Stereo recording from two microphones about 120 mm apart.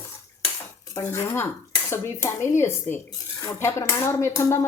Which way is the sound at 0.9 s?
25° left (ahead or behind).